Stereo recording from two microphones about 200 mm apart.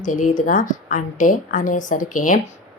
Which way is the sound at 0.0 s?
40° left (ahead or behind).